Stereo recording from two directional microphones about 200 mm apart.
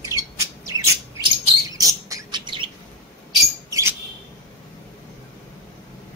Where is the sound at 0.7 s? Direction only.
15° right (ahead or behind).